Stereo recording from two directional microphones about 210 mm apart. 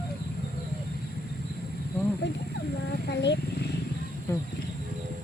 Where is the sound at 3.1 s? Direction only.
55° left (ahead or behind).